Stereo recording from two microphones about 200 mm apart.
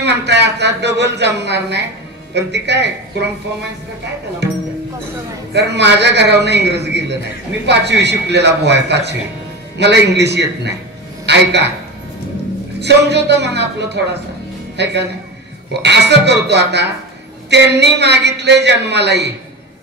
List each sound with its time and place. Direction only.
0.0 s a woman's voice: 60° right (ahead or behind)
5.5 s a woman's voice: 60° right (ahead or behind)
12.8 s a woman's voice: 60° right (ahead or behind)